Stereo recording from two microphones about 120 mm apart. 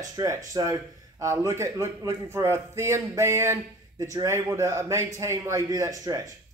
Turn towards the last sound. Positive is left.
turn(degrees=-30)  # may be behind; listen again after turning